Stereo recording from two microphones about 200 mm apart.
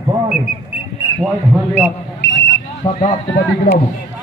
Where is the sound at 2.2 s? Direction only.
60° left (ahead or behind).